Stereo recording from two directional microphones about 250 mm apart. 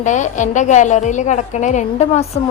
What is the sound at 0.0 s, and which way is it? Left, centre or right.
A woman's voice, left.